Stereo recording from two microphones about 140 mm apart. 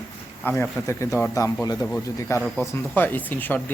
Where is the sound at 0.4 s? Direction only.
15° left (ahead or behind).